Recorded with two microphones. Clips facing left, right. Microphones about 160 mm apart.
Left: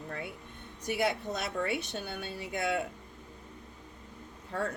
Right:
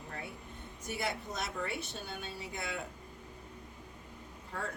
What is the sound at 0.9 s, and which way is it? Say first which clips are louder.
Speech: left 7 dB; 65° left (ahead or behind).